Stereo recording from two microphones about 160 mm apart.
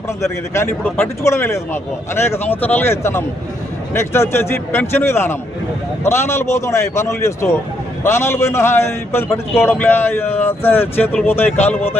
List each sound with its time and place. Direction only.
0.2 s a man's voice: 15° left (ahead or behind)